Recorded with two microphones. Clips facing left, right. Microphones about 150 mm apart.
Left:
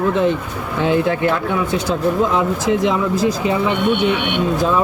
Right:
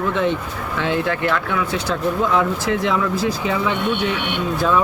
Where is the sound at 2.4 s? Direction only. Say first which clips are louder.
Left 3 dB; 20° left (ahead or behind).